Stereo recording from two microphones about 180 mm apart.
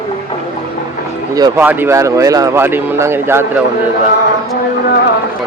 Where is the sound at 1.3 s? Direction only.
20° right (ahead or behind).